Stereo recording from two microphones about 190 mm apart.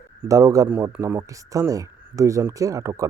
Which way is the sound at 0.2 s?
15° right (ahead or behind).